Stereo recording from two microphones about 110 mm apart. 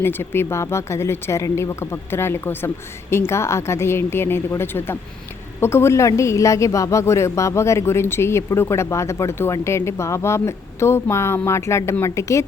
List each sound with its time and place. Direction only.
0.0 s a woman's voice: 20° left (ahead or behind)